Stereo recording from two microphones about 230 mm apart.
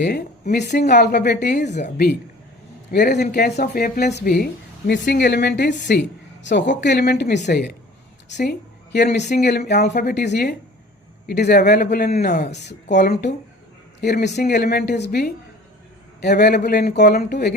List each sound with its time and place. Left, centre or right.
0.5 s a woman's voice: left
1.7 s a man's voice: left